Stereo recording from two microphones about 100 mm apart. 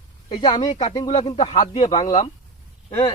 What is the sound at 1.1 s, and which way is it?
Speech, 90° left.